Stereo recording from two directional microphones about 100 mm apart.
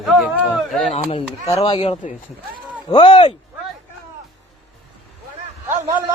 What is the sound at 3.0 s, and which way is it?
Speech, 65° left (ahead or behind).